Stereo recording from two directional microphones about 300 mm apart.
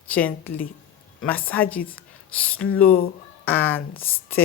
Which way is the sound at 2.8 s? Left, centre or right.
Left.